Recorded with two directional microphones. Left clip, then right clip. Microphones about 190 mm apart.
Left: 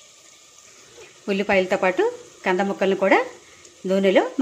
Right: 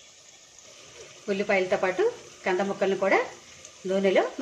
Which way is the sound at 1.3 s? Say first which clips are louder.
Left 4 dB; 50° left (ahead or behind).